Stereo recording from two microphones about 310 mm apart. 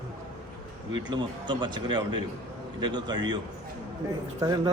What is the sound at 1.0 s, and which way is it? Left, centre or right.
A man's voice, centre.